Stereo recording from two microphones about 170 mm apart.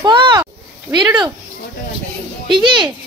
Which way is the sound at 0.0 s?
30° right (ahead or behind).